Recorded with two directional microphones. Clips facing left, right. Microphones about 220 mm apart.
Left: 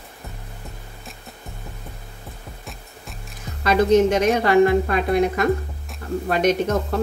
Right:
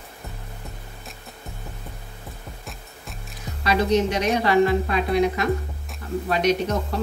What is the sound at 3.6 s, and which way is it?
Speech, 50° left (ahead or behind).